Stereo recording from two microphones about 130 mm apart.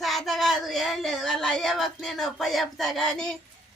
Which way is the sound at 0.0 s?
Centre (ahead or behind).